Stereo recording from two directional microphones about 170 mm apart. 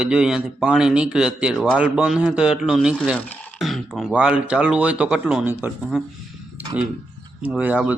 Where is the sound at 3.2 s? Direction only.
10° left (ahead or behind); by 6.0 s 10° right (ahead or behind).